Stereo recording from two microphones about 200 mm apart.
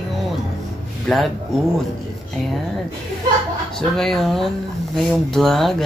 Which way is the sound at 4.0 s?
Centre (ahead or behind).